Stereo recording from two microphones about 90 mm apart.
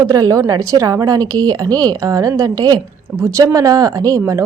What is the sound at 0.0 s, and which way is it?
A woman's voice, 40° right (ahead or behind).